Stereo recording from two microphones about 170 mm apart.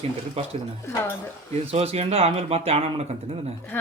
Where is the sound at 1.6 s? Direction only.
35° right (ahead or behind).